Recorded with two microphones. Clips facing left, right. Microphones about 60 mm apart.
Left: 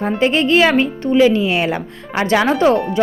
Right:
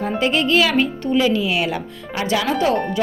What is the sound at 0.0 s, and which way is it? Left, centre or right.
A woman's voice, left.